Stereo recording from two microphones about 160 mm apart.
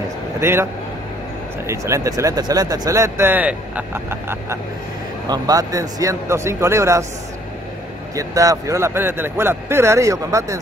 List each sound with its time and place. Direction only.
0.4 s speech: 15° right (ahead or behind)
1.7 s speech: 20° right (ahead or behind)
8.1 s speech: 20° right (ahead or behind)